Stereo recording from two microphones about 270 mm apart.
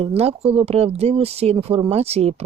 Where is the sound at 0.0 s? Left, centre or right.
Right.